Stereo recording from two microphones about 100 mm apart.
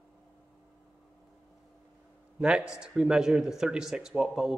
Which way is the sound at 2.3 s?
10° right (ahead or behind).